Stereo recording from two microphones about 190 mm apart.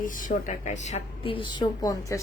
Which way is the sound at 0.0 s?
45° left (ahead or behind).